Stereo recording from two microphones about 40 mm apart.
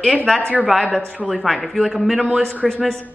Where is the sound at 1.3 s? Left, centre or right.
Centre.